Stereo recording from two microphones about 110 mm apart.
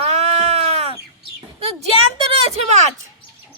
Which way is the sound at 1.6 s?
60° right (ahead or behind).